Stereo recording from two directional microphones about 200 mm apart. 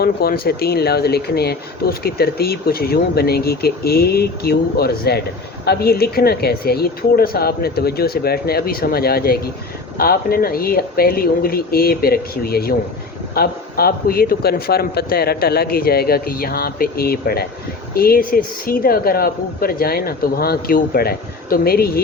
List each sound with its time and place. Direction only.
0.0 s speech: 50° left (ahead or behind)